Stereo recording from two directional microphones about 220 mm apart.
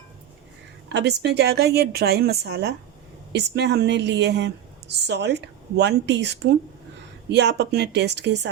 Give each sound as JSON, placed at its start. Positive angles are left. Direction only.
{"t": 0.9, "sound": "a woman's voice", "side_deg": -50}